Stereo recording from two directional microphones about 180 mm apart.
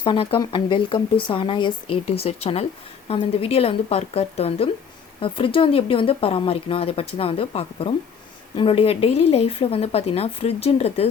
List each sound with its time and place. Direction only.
0.0 s speech: 25° left (ahead or behind)